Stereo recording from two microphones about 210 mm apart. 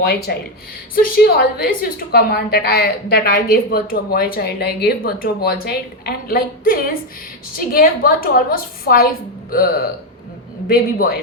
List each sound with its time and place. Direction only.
0.9 s a woman's voice: 45° left (ahead or behind)
10.7 s a woman's voice: 45° left (ahead or behind)